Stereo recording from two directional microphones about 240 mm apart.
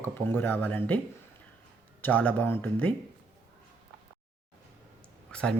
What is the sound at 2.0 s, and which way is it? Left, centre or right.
Speech, centre.